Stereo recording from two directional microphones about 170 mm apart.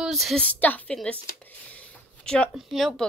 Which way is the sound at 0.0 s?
Centre (ahead or behind).